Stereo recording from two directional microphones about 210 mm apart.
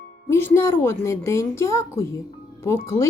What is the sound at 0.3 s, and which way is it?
Speech, 10° left (ahead or behind).